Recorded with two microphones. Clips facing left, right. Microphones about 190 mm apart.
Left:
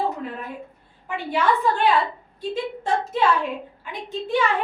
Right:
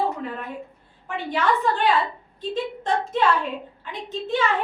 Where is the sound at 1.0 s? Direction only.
10° left (ahead or behind).